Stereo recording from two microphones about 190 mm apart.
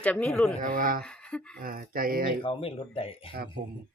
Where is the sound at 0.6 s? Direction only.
45° right (ahead or behind).